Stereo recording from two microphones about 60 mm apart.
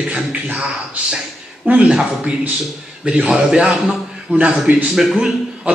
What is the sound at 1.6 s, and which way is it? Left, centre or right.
A man's voice, centre.